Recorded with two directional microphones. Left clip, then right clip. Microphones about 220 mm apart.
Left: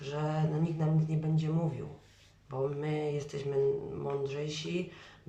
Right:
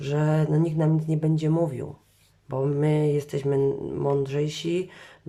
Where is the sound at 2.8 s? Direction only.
40° right (ahead or behind).